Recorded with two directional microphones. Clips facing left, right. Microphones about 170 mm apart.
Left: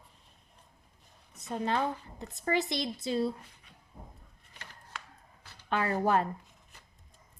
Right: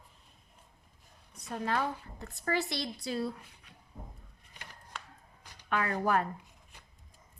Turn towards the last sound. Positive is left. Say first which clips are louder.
# left 2 dB
turn(degrees=30)  # may be behind; listen again after turning